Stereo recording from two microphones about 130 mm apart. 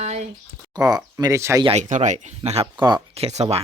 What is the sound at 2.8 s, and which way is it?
Speech, 35° right (ahead or behind).